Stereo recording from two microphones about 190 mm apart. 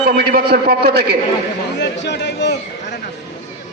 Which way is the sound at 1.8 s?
65° left (ahead or behind).